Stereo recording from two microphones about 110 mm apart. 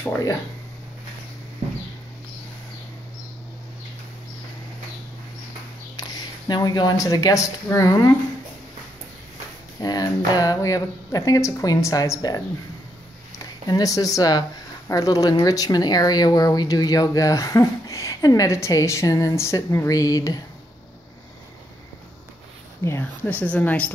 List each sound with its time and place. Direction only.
5.9 s speech: 35° left (ahead or behind)
9.8 s speech: 35° left (ahead or behind)
13.7 s speech: 35° left (ahead or behind)
22.8 s speech: 20° left (ahead or behind)